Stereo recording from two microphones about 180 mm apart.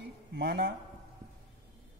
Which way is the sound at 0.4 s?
60° right (ahead or behind).